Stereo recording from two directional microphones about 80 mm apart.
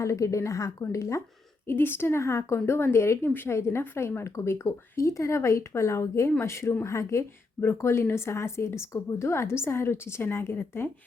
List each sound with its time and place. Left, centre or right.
0.0 s a woman's voice: left
1.6 s a woman's voice: left